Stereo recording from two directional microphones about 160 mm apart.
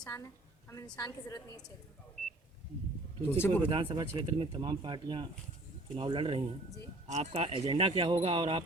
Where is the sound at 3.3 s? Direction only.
15° left (ahead or behind).